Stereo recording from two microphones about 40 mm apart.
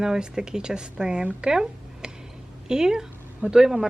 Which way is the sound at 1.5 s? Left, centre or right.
Centre.